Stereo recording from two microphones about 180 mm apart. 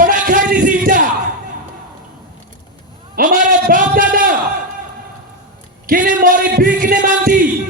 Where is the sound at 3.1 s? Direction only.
45° right (ahead or behind).